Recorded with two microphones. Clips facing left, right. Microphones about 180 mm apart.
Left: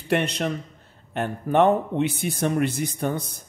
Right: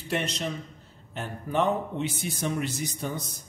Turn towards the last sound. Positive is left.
turn(degrees=60)  # may be behind; listen again after turning